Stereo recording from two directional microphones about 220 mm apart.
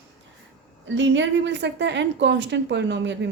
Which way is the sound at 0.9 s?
55° right (ahead or behind).